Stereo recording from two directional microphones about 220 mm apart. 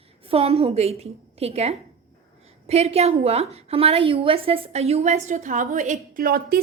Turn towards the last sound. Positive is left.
turn(degrees=-45)  # may be behind; listen again after turning